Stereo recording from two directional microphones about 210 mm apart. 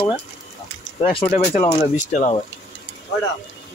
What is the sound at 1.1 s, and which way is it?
Speech, 30° left (ahead or behind).